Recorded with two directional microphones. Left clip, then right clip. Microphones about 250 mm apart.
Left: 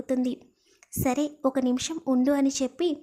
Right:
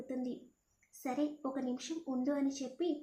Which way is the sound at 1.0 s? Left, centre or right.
Left.